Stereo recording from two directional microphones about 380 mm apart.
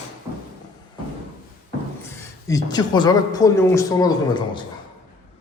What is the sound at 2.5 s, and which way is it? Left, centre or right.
A man's voice, centre.